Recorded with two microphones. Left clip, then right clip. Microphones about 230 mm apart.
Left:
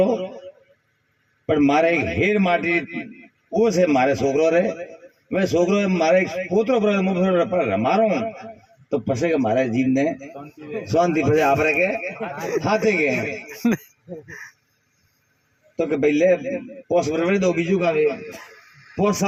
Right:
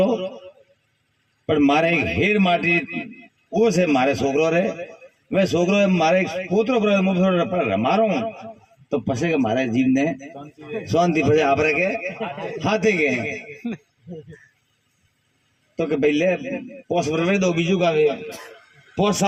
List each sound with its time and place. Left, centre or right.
0.0 s a man's voice: right
1.5 s a man's voice: right
13.6 s speech: left
15.7 s a man's voice: right